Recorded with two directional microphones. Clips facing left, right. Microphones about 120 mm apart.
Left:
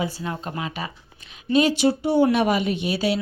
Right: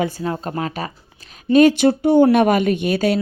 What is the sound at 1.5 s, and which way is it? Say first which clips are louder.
Speech: right 6 dB; 55° right (ahead or behind).